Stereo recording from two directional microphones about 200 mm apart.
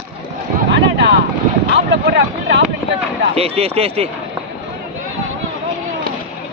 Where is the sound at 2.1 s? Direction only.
60° right (ahead or behind).